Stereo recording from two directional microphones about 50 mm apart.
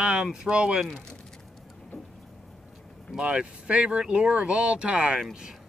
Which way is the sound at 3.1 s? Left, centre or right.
Centre.